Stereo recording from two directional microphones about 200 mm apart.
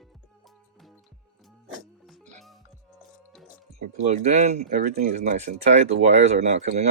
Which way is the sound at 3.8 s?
35° right (ahead or behind).